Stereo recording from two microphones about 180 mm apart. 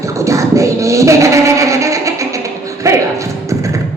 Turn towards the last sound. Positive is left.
turn(degrees=-15)  # may be behind; listen again after turning